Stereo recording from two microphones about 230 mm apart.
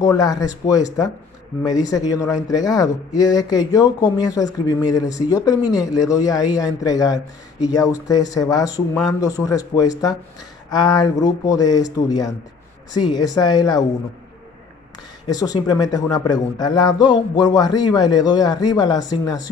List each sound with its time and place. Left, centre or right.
0.0 s a man's voice: centre
15.2 s a man's voice: centre